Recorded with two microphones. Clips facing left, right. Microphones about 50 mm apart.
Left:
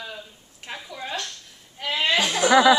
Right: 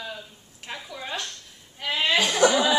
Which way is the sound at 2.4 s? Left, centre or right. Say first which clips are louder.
Left 7 dB; left.